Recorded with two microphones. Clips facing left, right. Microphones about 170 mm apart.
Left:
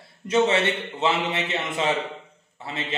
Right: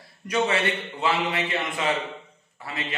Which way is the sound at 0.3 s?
25° left (ahead or behind).